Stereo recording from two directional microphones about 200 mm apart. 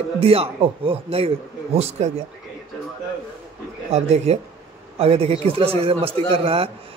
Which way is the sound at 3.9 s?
35° right (ahead or behind).